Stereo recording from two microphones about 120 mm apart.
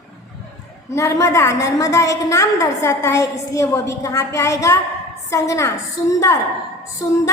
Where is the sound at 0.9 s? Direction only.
25° left (ahead or behind).